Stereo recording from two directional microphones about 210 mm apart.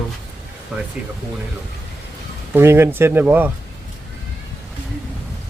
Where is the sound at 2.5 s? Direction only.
10° right (ahead or behind).